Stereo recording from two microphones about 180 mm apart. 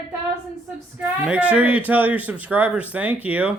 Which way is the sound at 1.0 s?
5° right (ahead or behind).